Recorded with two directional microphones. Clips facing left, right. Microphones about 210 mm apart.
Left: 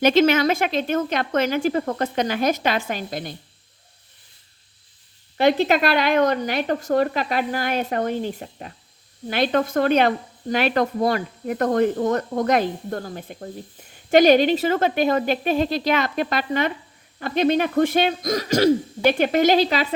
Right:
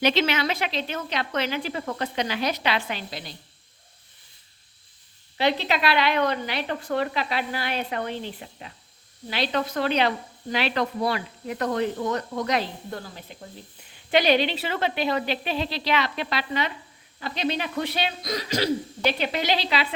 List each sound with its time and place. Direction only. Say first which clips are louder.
0.0 s speech: left 7 dB; 45° left (ahead or behind)
5.4 s speech: left 6 dB; 50° left (ahead or behind)